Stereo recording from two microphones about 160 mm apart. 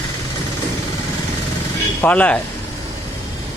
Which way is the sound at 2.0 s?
10° left (ahead or behind).